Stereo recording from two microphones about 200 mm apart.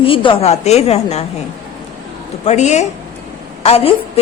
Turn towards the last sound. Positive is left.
turn(degrees=30)  # may be behind; listen again after turning